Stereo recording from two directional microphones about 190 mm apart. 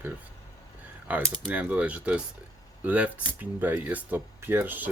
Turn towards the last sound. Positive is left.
turn(degrees=-10)  # may be behind; listen again after turning